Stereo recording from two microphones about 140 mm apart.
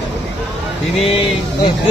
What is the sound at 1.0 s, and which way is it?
Speech, 40° left (ahead or behind).